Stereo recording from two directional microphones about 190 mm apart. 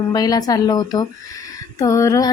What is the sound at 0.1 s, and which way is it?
A woman's voice, 20° left (ahead or behind).